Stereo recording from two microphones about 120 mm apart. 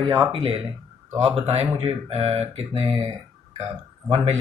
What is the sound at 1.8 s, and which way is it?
Mantra, 55° right (ahead or behind).